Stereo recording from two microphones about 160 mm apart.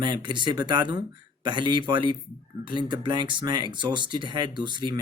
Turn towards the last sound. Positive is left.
turn(degrees=-30)  # may be behind; listen again after turning